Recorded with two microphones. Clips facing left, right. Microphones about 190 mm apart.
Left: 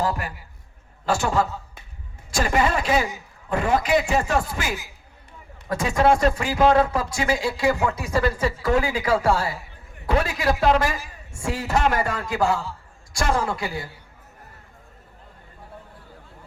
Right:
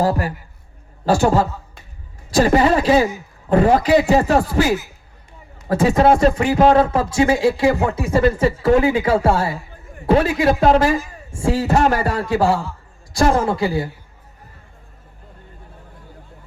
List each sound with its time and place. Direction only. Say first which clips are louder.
0.0 s a man's voice: right 7 dB; 35° right (ahead or behind)